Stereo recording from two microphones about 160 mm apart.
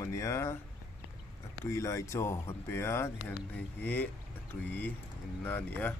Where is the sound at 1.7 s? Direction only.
20° left (ahead or behind).